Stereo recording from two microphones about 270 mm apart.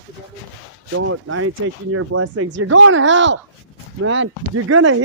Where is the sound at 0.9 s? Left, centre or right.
Right.